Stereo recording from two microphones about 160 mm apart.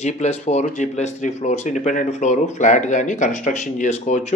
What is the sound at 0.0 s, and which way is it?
Speech, 45° left (ahead or behind).